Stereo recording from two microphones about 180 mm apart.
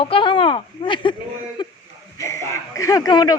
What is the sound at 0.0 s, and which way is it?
Speech, 30° left (ahead or behind).